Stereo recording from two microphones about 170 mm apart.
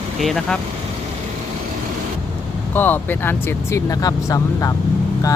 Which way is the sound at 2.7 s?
10° left (ahead or behind).